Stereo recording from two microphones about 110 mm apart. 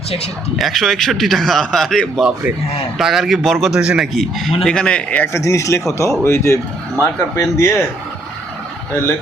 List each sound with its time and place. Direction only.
0.6 s a man's voice: centre (ahead or behind)
5.3 s speech: 30° left (ahead or behind)